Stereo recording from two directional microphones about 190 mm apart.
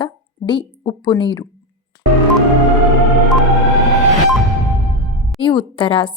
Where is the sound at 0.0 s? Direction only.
25° left (ahead or behind).